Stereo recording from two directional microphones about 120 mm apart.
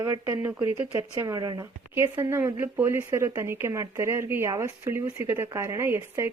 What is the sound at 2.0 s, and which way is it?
Speech, 20° right (ahead or behind).